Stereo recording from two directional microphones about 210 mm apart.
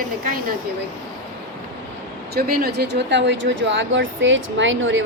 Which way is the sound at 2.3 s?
45° right (ahead or behind).